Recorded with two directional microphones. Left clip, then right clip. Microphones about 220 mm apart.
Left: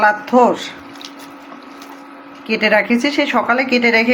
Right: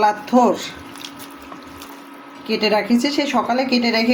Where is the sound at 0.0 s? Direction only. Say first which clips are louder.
Left 3 dB; centre (ahead or behind).